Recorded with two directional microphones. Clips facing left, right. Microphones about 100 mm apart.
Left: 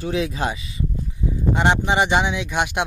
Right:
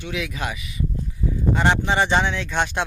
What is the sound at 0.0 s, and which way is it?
Speech, 35° left (ahead or behind).